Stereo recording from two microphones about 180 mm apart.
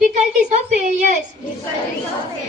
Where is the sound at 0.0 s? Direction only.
45° right (ahead or behind).